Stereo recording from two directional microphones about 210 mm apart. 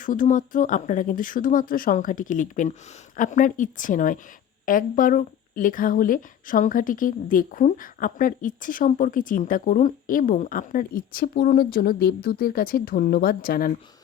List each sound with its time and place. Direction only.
0.0 s speech: 40° left (ahead or behind)